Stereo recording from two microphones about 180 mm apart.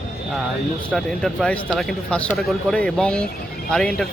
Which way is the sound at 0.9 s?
5° left (ahead or behind).